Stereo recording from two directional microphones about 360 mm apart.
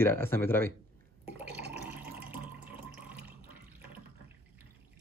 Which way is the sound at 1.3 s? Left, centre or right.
Centre.